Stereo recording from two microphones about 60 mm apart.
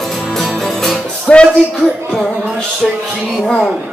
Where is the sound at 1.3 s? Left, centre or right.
Centre.